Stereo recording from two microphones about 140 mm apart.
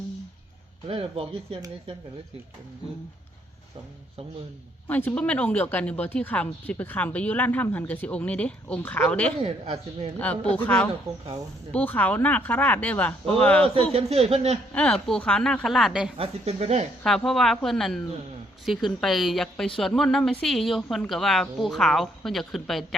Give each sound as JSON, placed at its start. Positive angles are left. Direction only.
{"t": 0.9, "sound": "speech", "side_deg": -40}
{"t": 4.9, "sound": "speech", "side_deg": 15}
{"t": 9.4, "sound": "speech", "side_deg": -45}
{"t": 10.2, "sound": "speech", "side_deg": 10}
{"t": 13.9, "sound": "speech", "side_deg": -45}
{"t": 14.7, "sound": "a woman's voice", "side_deg": 10}
{"t": 16.1, "sound": "speech", "side_deg": -45}
{"t": 17.0, "sound": "a woman's voice", "side_deg": 5}